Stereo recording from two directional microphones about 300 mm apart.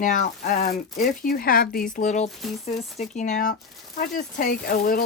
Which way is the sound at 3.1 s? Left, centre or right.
Left.